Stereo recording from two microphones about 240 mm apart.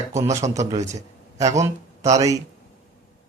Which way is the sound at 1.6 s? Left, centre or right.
Centre.